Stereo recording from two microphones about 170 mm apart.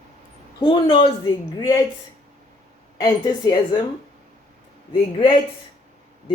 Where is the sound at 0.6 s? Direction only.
25° left (ahead or behind).